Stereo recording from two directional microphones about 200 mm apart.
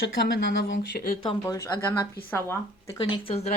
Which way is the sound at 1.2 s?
20° left (ahead or behind).